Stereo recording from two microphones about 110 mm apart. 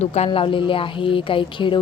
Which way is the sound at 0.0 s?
80° left.